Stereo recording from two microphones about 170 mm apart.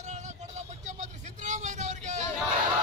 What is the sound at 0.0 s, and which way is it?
Vehicle, 40° right (ahead or behind).